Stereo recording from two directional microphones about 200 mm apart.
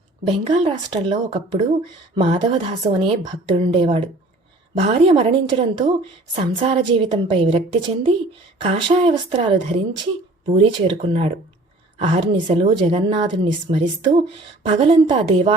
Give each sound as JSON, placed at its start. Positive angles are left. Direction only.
{"t": 0.3, "sound": "a woman's voice", "side_deg": -25}